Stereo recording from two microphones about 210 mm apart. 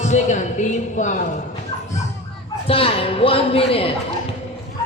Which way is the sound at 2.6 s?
25° left (ahead or behind).